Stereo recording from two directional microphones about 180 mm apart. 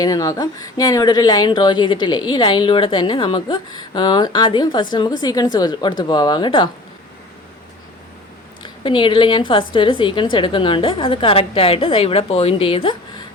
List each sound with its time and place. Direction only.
0.0 s a woman's voice: 20° left (ahead or behind)
8.6 s a woman's voice: 30° left (ahead or behind)